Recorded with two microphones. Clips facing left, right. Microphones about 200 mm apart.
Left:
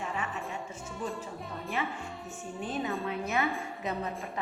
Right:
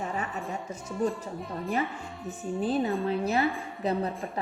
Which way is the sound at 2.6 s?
35° right (ahead or behind).